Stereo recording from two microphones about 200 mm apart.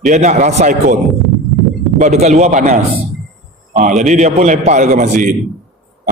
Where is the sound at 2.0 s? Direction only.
35° right (ahead or behind).